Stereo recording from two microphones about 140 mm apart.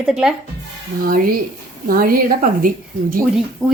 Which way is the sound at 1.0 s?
90° right.